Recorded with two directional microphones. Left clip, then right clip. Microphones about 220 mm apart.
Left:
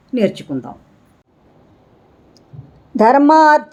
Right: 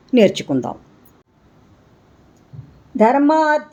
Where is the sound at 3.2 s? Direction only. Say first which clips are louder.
Left 6 dB; 15° left (ahead or behind).